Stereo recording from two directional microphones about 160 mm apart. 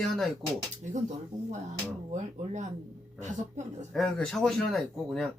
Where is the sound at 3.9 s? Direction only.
5° left (ahead or behind).